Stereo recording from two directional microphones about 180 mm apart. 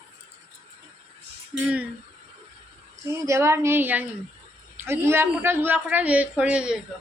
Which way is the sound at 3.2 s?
15° right (ahead or behind).